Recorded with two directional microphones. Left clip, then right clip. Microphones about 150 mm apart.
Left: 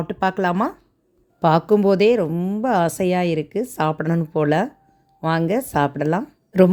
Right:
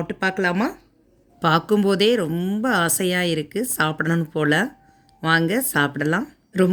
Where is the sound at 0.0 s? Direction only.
35° left (ahead or behind).